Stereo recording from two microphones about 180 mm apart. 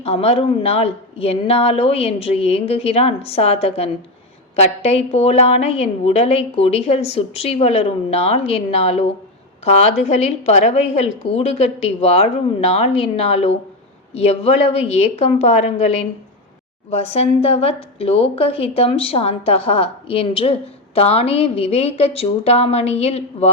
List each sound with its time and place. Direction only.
0.0 s a woman's voice: 35° left (ahead or behind)